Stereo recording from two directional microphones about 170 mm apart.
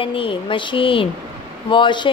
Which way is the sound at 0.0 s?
30° left (ahead or behind).